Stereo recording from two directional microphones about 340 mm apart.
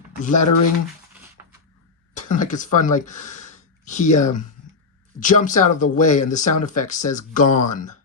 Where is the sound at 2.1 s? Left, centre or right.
Left.